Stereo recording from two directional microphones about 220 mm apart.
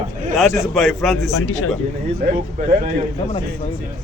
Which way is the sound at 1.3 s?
75° left (ahead or behind).